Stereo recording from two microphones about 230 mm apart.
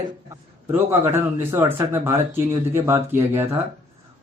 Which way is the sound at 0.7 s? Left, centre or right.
Centre.